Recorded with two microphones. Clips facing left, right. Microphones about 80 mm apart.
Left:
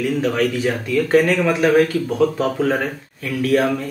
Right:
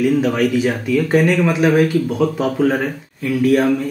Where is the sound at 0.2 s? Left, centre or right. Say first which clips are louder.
Right 3 dB; centre.